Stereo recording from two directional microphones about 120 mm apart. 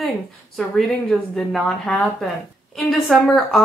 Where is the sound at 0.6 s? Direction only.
5° left (ahead or behind).